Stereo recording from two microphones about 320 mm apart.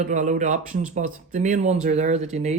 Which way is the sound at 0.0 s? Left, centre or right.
Right.